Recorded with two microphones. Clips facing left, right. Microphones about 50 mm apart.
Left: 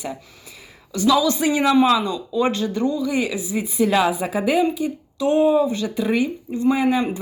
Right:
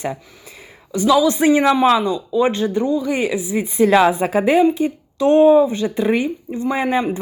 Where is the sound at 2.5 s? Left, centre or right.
Right.